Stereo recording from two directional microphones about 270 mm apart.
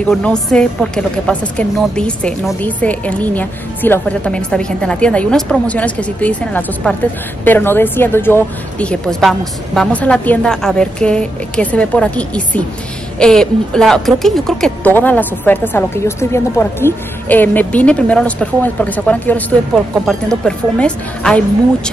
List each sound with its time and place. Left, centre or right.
0.0 s a woman's voice: centre